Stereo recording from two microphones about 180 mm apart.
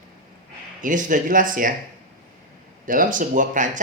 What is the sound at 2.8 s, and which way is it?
Speech, 50° right (ahead or behind).